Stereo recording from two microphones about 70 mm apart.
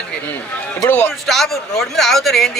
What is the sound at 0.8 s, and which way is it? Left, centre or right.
Speech, left.